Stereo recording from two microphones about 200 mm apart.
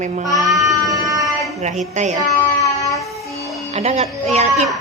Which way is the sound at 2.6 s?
15° left (ahead or behind).